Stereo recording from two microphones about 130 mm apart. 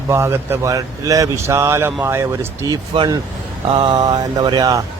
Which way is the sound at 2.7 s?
35° right (ahead or behind).